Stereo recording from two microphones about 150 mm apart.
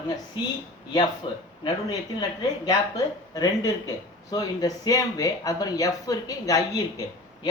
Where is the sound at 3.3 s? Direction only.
25° left (ahead or behind).